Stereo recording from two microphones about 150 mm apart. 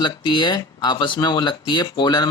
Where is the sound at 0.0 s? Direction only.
30° left (ahead or behind).